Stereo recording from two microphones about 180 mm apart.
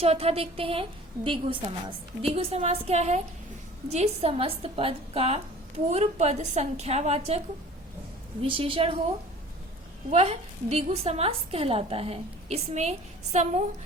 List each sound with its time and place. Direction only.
0.0 s a woman's voice: 35° right (ahead or behind)
10.1 s a woman's voice: 35° right (ahead or behind)